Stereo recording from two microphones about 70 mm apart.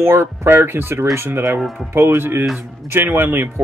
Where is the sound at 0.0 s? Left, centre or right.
Right.